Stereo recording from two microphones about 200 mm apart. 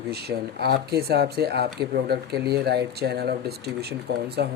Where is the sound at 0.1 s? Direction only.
55° right (ahead or behind).